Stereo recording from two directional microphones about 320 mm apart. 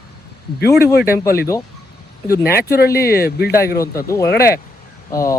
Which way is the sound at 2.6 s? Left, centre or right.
Left.